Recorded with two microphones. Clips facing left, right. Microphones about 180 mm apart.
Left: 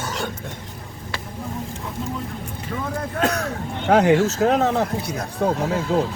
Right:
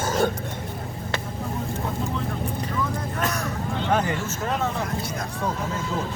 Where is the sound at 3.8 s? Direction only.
75° left (ahead or behind).